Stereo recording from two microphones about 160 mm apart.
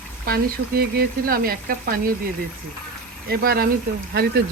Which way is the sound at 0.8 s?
70° right (ahead or behind).